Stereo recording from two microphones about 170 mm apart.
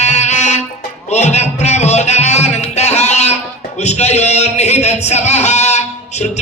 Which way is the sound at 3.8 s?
40° left (ahead or behind).